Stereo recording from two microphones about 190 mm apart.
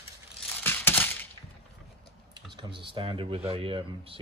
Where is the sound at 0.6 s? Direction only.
10° left (ahead or behind).